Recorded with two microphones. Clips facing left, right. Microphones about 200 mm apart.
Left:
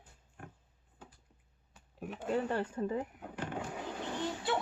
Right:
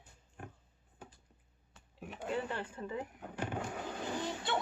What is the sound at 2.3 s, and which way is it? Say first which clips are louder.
Speech: left 5 dB; 40° left (ahead or behind).